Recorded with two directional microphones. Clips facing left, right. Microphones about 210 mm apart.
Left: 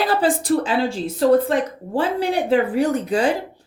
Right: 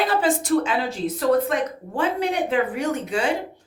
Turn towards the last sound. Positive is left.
turn(degrees=35)  # may be behind; listen again after turning